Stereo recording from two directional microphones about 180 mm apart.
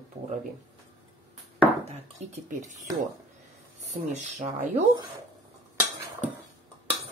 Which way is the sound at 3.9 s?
40° right (ahead or behind).